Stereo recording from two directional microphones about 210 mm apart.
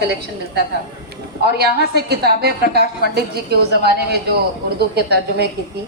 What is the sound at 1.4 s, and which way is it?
A woman's voice, 50° right (ahead or behind).